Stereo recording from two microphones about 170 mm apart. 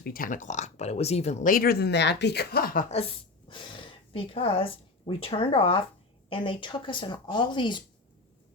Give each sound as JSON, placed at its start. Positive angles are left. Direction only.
{"t": 0.0, "sound": "speech", "side_deg": 55}
{"t": 3.5, "sound": "speech", "side_deg": 30}